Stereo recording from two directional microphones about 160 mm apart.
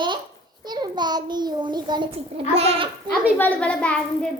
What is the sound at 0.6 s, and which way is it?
A child's voice, 25° right (ahead or behind).